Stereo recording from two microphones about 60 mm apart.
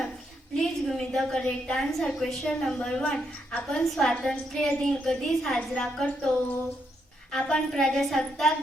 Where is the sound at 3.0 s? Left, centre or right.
Left.